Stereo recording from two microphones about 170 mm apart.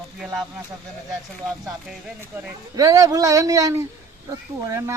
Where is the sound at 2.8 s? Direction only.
20° right (ahead or behind).